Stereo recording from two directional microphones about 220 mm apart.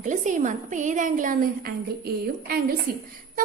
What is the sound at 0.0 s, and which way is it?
A woman's voice, 35° right (ahead or behind).